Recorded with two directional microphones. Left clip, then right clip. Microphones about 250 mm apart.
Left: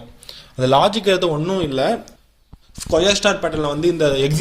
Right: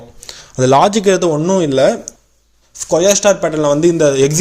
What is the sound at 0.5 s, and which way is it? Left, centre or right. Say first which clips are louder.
A man's voice: right 5 dB; right.